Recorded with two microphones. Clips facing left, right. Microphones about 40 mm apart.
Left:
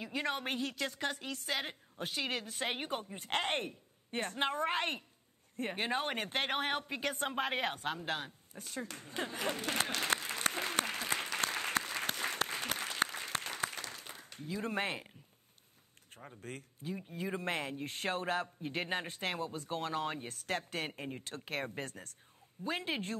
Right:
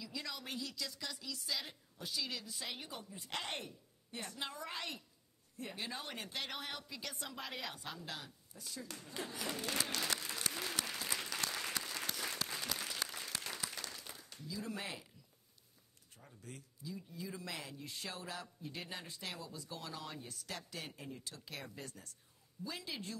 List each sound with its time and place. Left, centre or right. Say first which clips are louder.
0.0 s speech: left 9 dB; left
5.6 s a sound: left 9 dB; left
16.1 s speech: left 8 dB; left